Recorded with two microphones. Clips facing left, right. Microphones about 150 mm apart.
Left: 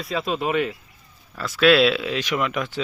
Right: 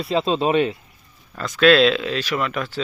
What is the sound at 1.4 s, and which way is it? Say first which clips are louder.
Speech: right 2 dB; 5° left (ahead or behind).